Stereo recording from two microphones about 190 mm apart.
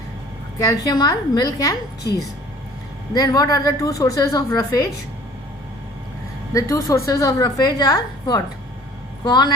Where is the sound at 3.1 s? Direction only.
20° left (ahead or behind).